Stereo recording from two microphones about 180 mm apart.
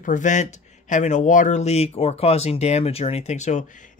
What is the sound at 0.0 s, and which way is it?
Speech, 45° left (ahead or behind).